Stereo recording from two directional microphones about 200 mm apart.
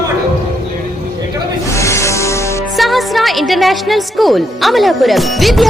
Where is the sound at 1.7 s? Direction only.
15° left (ahead or behind).